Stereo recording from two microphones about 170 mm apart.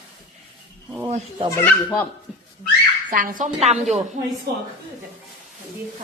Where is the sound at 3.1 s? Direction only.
55° right (ahead or behind).